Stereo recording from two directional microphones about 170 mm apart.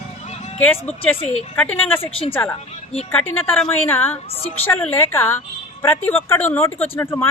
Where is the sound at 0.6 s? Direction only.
10° left (ahead or behind).